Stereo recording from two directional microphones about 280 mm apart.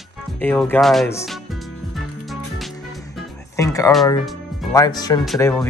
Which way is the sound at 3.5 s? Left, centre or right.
Centre.